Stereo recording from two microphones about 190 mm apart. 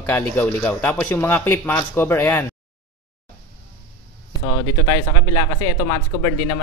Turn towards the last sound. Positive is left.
turn(degrees=20)  # may be behind; listen again after turning